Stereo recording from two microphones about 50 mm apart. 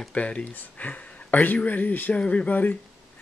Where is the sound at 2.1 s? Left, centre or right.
Left.